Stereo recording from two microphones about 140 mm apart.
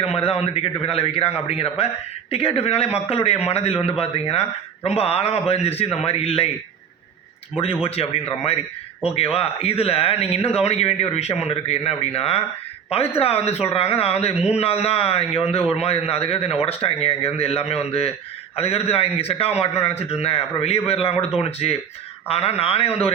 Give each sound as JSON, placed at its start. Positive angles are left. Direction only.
{"t": 0.2, "sound": "a man's voice", "side_deg": 45}
{"t": 7.6, "sound": "a man's voice", "side_deg": 45}